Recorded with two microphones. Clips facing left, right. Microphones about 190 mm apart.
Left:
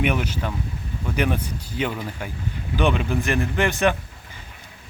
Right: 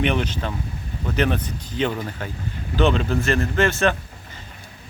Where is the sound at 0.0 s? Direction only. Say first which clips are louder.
Right 1 dB; 10° left (ahead or behind).